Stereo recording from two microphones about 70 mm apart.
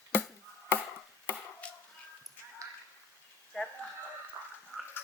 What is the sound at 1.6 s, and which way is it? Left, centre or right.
Dog, centre.